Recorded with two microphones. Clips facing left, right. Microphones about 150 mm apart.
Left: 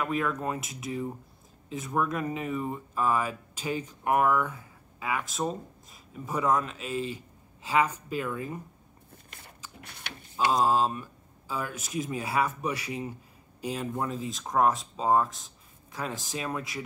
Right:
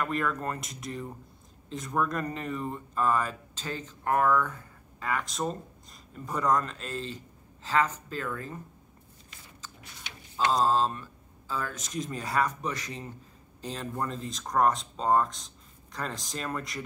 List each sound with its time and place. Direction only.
0.0 s speech: 5° left (ahead or behind)
9.8 s a sound: 60° left (ahead or behind)
10.3 s speech: 10° left (ahead or behind)